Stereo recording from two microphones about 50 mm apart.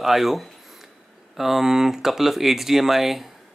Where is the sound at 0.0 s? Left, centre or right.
Centre.